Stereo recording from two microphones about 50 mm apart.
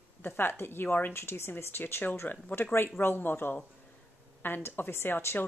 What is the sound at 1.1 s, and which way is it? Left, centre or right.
Speech, left.